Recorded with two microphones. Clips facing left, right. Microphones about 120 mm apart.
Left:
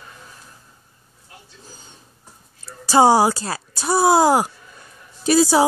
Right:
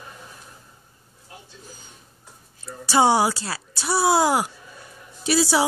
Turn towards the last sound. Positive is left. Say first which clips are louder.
# left 5 dB
turn(degrees=45)  # may be behind; listen again after turning